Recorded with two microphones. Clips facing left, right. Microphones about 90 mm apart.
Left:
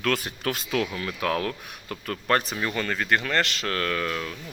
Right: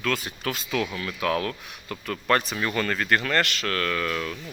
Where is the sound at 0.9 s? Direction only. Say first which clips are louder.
Right 1 dB; 30° left (ahead or behind).